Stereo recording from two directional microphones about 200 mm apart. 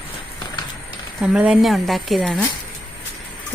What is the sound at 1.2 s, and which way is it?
A woman's voice, 5° right (ahead or behind).